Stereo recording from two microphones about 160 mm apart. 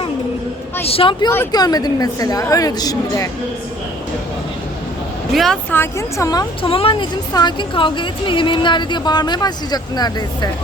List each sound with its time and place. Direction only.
0.9 s speech: 35° left (ahead or behind)
1.5 s a woman's voice: 25° left (ahead or behind)
5.3 s speech: centre (ahead or behind)
5.7 s a woman's voice: 15° left (ahead or behind)